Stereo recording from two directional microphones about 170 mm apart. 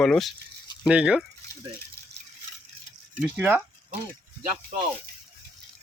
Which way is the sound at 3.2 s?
10° right (ahead or behind).